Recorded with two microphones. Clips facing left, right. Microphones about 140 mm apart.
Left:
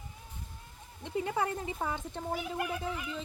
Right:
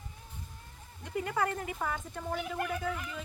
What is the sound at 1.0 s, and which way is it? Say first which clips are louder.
A woman's voice: even; 20° left (ahead or behind).